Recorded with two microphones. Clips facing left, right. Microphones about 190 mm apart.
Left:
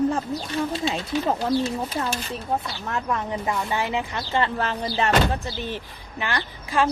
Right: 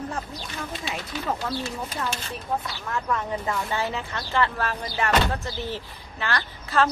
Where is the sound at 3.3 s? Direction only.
15° left (ahead or behind).